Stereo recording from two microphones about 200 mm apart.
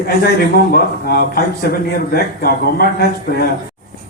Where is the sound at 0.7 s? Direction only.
50° left (ahead or behind).